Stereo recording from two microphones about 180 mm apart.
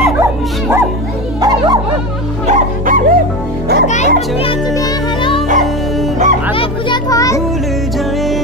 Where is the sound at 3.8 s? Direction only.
40° left (ahead or behind).